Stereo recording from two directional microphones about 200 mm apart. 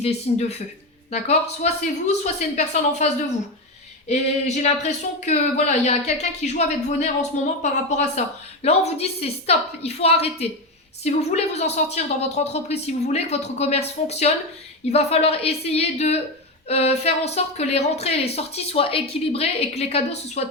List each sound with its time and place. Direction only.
0.0 s speech: 35° left (ahead or behind)
4.1 s speech: 35° left (ahead or behind)